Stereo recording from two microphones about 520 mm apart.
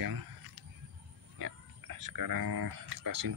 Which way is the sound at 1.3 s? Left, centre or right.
Right.